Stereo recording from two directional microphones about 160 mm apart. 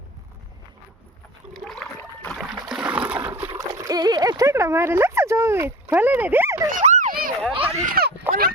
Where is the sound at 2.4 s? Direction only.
5° right (ahead or behind).